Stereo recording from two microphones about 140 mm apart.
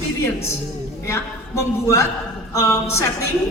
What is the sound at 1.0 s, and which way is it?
A man's voice, 20° left (ahead or behind).